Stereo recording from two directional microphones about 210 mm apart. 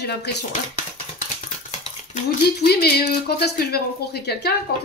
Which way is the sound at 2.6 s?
50° left (ahead or behind).